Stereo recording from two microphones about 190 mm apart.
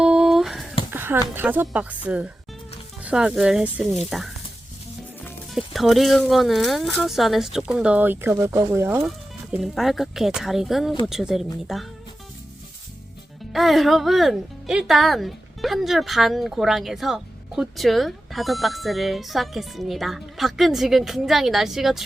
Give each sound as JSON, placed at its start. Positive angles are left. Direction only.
{"t": 0.0, "sound": "a sound", "side_deg": -5}
{"t": 1.3, "sound": "speech", "side_deg": -10}
{"t": 5.5, "sound": "speech", "side_deg": 0}
{"t": 9.0, "sound": "speech", "side_deg": 0}
{"t": 13.5, "sound": "speech", "side_deg": 0}